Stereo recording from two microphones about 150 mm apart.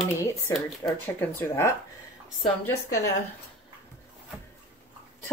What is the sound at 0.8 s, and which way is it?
Speech, 20° left (ahead or behind).